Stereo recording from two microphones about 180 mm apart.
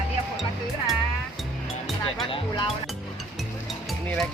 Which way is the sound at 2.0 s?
30° left (ahead or behind).